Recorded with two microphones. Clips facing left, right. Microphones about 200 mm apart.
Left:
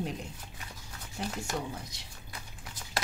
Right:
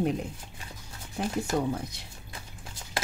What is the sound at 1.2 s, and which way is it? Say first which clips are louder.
Speech: right 5 dB; 55° right (ahead or behind).